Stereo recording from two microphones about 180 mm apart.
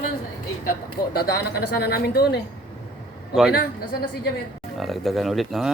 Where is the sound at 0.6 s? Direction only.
55° left (ahead or behind).